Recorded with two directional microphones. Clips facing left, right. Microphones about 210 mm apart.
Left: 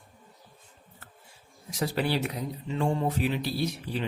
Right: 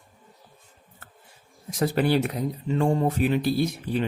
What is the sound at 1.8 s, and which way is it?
Speech, 50° right (ahead or behind).